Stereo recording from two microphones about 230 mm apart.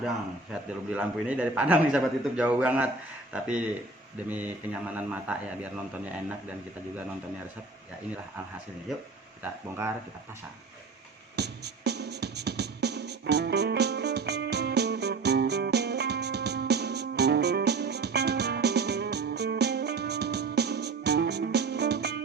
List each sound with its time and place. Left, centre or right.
0.5 s a man's voice: centre
9.4 s a man's voice: centre
11.3 s music: right